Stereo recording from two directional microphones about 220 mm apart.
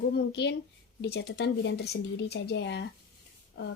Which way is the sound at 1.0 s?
45° left (ahead or behind).